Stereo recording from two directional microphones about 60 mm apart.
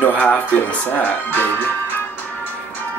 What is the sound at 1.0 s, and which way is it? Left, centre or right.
Speech, left.